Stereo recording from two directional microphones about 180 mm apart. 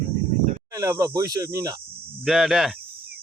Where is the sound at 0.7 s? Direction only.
15° right (ahead or behind).